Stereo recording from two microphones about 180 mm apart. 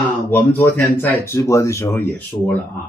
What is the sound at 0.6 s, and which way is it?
Speech, 15° left (ahead or behind).